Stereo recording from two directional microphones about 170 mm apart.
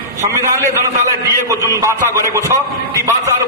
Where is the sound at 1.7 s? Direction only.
15° right (ahead or behind).